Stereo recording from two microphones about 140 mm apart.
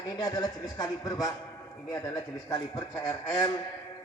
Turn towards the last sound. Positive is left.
turn(degrees=25)  # may be behind; listen again after turning